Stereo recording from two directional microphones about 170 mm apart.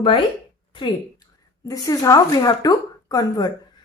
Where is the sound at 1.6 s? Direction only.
20° left (ahead or behind).